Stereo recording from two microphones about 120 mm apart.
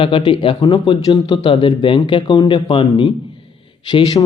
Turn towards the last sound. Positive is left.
turn(degrees=30)  # may be behind; listen again after turning